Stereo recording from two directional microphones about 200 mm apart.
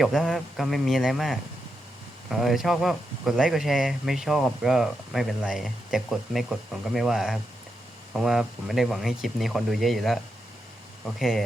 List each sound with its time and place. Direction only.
0.0 s speech: centre (ahead or behind)